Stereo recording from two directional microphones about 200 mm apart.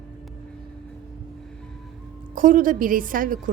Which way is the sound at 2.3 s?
40° right (ahead or behind).